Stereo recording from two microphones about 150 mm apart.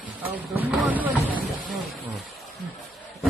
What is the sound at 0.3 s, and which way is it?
Speech, 10° right (ahead or behind).